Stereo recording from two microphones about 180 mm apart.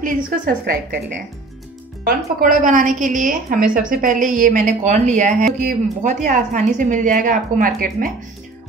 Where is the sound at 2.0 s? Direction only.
50° right (ahead or behind).